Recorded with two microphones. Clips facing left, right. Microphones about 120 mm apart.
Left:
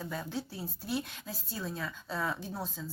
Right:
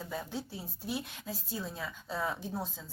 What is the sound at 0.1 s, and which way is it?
A woman's voice, 20° right (ahead or behind).